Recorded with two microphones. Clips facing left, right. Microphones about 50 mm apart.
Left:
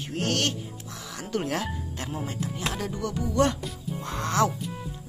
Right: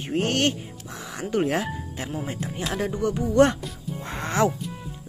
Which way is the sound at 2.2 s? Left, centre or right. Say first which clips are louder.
Right 1 dB; right.